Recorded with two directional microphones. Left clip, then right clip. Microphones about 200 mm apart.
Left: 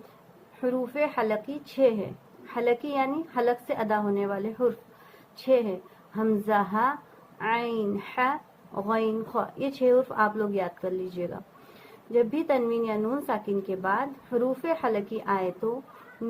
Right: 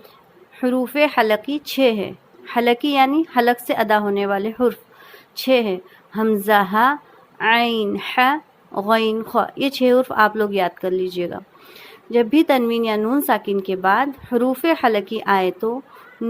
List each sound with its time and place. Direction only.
0.6 s speech: 45° right (ahead or behind)